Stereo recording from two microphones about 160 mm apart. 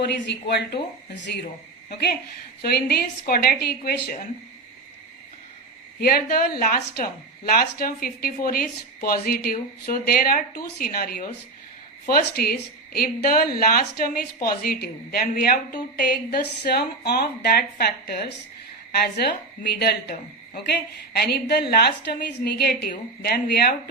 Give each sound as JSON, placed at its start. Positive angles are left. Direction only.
{"t": 0.0, "sound": "speech", "side_deg": 90}
{"t": 2.6, "sound": "a woman's voice", "side_deg": 75}
{"t": 6.0, "sound": "a woman's voice", "side_deg": 70}
{"t": 16.0, "sound": "a woman's voice", "side_deg": 80}
{"t": 22.9, "sound": "a woman's voice", "side_deg": 75}